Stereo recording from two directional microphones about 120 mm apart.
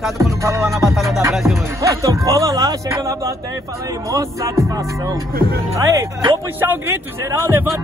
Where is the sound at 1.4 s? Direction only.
20° right (ahead or behind).